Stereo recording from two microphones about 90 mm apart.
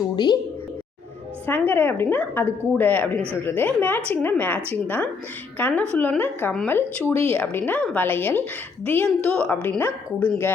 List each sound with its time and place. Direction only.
0.2 s a woman's voice: 50° left (ahead or behind)
1.5 s a woman's voice: 20° left (ahead or behind)